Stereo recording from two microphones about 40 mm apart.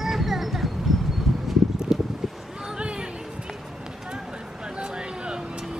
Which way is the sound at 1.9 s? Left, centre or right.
Centre.